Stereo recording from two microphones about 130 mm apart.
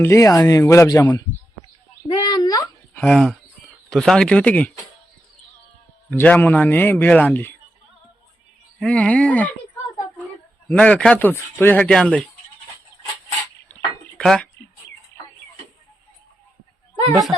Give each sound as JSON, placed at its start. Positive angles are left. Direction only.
{"t": 0.0, "sound": "speech", "side_deg": 25}
{"t": 2.0, "sound": "speech", "side_deg": 30}
{"t": 2.9, "sound": "speech", "side_deg": 10}
{"t": 6.1, "sound": "speech", "side_deg": 10}
{"t": 8.8, "sound": "speech", "side_deg": 10}
{"t": 10.7, "sound": "speech", "side_deg": 10}
{"t": 14.2, "sound": "speech", "side_deg": 10}